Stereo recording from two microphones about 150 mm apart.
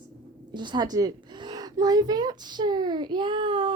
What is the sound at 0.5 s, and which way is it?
A woman's voice, 30° right (ahead or behind).